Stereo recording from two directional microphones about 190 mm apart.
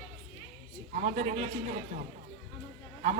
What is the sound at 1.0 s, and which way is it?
Speech, 35° right (ahead or behind).